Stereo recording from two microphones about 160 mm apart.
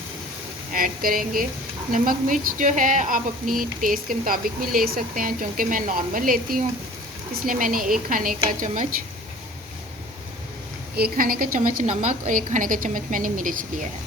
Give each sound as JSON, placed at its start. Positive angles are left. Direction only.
{"t": 0.7, "sound": "speech", "side_deg": -60}
{"t": 10.9, "sound": "speech", "side_deg": -70}